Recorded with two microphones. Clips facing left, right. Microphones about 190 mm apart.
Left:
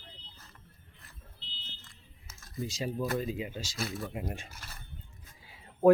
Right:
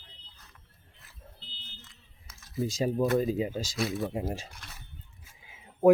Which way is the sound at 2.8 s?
45° right (ahead or behind).